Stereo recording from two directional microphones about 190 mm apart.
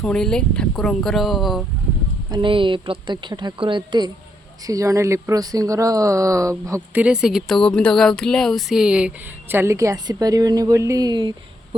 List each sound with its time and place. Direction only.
0.0 s speech: 5° left (ahead or behind)
2.3 s speech: 25° right (ahead or behind)